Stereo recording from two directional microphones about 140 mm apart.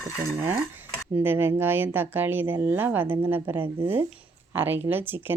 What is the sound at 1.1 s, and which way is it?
Speech, 15° right (ahead or behind).